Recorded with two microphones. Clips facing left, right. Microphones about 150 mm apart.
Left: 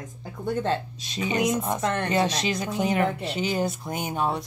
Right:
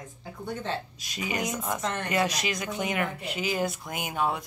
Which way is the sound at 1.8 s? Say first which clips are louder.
Left 5 dB; 55° left (ahead or behind).